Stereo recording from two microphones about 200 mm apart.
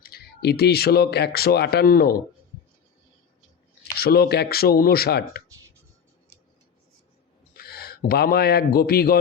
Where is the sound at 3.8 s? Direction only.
50° left (ahead or behind).